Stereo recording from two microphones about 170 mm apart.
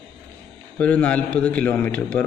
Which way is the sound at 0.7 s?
10° left (ahead or behind).